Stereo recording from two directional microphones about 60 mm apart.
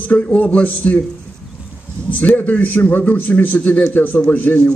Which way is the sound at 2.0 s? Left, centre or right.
Left.